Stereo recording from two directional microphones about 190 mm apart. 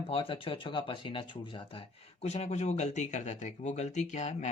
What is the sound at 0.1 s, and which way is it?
Speech, 30° left (ahead or behind).